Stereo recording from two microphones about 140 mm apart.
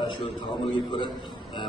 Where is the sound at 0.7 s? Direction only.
35° left (ahead or behind).